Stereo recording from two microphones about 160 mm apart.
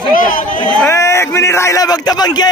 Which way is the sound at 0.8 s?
15° left (ahead or behind).